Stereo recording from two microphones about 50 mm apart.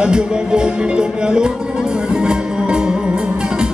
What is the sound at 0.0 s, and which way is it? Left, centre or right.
Music, centre.